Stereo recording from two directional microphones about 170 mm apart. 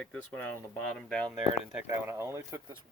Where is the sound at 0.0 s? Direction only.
10° left (ahead or behind).